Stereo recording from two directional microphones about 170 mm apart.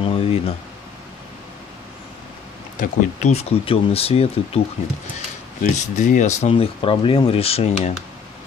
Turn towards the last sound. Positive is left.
turn(degrees=35)  # may be behind; listen again after turning